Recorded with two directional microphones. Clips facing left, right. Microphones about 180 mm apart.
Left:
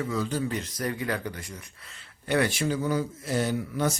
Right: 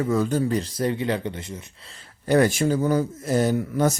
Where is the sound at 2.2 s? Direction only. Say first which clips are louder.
Right 6 dB; 40° right (ahead or behind).